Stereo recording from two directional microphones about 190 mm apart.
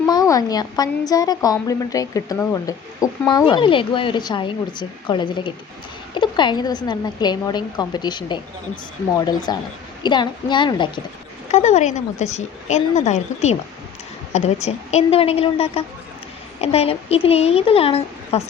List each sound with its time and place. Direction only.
0.1 s a woman's voice: 20° left (ahead or behind)
11.5 s a woman's voice: 35° left (ahead or behind)